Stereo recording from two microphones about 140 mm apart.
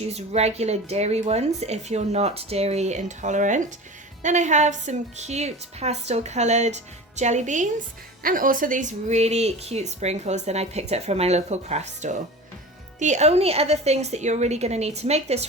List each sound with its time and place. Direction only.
0.1 s a woman's voice: 50° right (ahead or behind)
8.2 s speech: 85° right; by 15.4 s 50° right (ahead or behind)